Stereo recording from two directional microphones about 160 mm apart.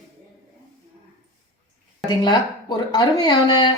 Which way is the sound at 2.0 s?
25° left (ahead or behind).